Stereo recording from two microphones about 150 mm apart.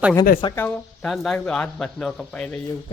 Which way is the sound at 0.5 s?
10° left (ahead or behind).